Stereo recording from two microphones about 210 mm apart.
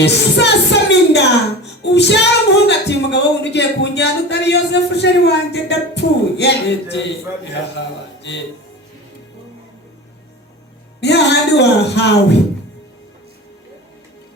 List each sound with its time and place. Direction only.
0.0 s a woman's voice: 55° left (ahead or behind)
11.0 s a woman's voice: 55° left (ahead or behind)